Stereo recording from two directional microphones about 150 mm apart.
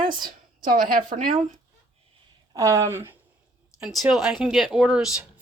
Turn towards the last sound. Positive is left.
turn(degrees=-5)  # may be behind; listen again after turning